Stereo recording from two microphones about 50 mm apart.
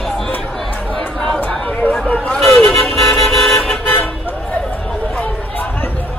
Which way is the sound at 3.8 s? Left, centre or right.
Left.